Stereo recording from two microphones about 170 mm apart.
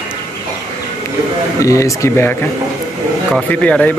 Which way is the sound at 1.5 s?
20° left (ahead or behind).